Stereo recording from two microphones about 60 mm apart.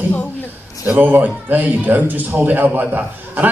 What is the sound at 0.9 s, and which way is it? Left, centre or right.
A man's voice, right.